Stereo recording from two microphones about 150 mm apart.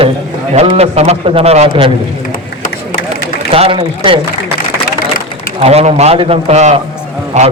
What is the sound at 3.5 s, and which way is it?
Speech, 40° right (ahead or behind).